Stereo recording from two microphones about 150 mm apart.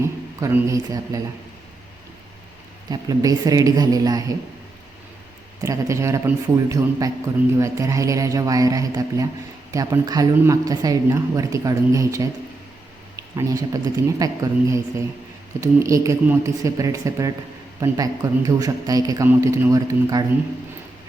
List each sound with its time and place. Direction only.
0.0 s speech: 20° right (ahead or behind)
2.9 s speech: 25° right (ahead or behind)
5.6 s speech: 20° right (ahead or behind)
13.3 s speech: 25° right (ahead or behind)